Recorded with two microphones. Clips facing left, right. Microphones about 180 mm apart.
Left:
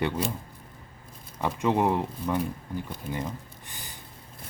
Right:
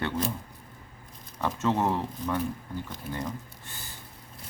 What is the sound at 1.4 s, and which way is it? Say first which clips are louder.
Speech: left 2 dB; 15° left (ahead or behind).